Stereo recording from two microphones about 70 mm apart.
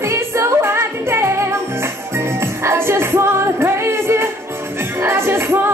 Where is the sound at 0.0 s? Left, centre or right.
Right.